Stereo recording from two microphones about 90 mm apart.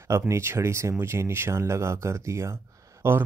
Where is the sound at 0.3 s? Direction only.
30° right (ahead or behind).